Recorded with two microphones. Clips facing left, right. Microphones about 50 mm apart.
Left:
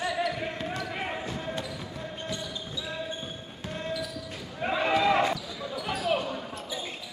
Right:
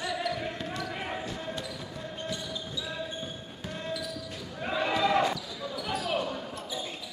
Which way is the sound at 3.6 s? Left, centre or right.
Centre.